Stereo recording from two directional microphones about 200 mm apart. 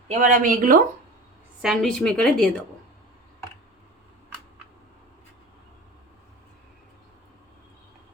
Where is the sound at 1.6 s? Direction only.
Centre (ahead or behind).